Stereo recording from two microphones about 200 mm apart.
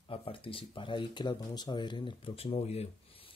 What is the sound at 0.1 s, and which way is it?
Speech, 25° left (ahead or behind).